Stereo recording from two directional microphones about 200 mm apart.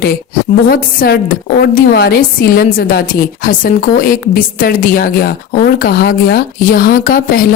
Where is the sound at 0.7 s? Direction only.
50° left (ahead or behind).